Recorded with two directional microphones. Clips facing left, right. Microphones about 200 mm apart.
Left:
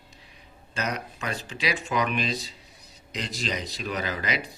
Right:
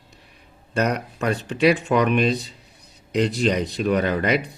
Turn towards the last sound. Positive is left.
turn(degrees=-60)  # may be behind; listen again after turning